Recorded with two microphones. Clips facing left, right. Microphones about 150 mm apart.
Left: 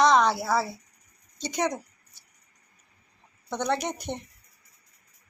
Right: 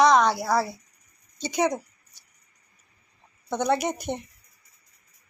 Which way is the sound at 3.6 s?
5° right (ahead or behind).